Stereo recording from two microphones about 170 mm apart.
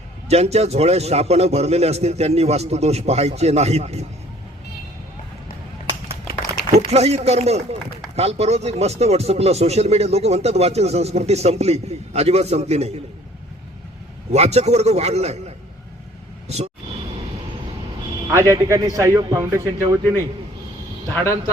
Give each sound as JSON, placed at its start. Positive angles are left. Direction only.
{"t": 0.3, "sound": "speech", "side_deg": -40}
{"t": 6.7, "sound": "speech", "side_deg": -40}
{"t": 14.3, "sound": "speech", "side_deg": -40}
{"t": 18.3, "sound": "speech", "side_deg": -15}
{"t": 21.1, "sound": "a man's voice", "side_deg": 15}